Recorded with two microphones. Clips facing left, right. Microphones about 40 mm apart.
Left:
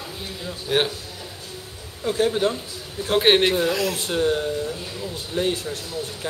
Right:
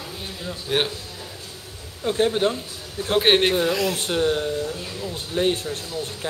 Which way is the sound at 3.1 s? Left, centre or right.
Centre.